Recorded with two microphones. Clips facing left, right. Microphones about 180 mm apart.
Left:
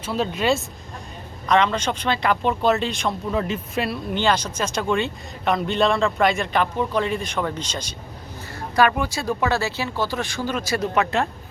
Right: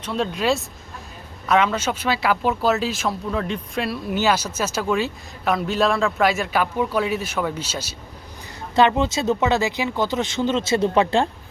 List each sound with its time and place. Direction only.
0.0 s speech: centre (ahead or behind)
8.7 s speech: 20° right (ahead or behind)